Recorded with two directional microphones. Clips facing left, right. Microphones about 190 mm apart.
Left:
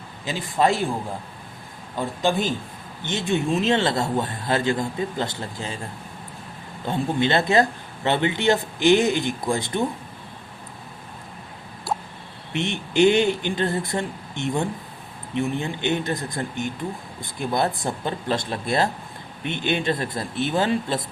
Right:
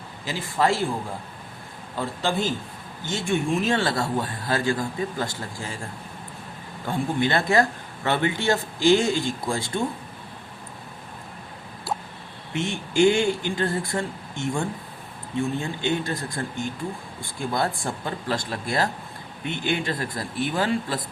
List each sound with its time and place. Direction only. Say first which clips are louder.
0.3 s speech: left 2 dB; 20° left (ahead or behind)
2.0 s a man's voice: left 3 dB; 15° left (ahead or behind)
6.8 s speech: left 2 dB; 25° left (ahead or behind)
12.5 s speech: left 1 dB; 20° left (ahead or behind)